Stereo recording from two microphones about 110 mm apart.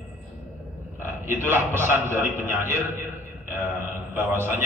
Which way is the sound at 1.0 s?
20° right (ahead or behind).